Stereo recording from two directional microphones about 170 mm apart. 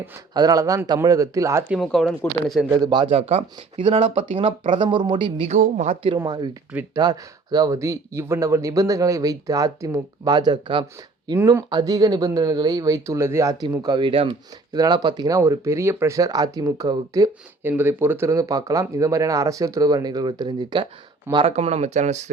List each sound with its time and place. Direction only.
0.3 s speech: 20° right (ahead or behind)
1.7 s speech: centre (ahead or behind)
2.6 s speech: 20° right (ahead or behind)
5.5 s speech: 45° right (ahead or behind)
6.1 s speech: 25° right (ahead or behind)
21.4 s speech: 35° right (ahead or behind)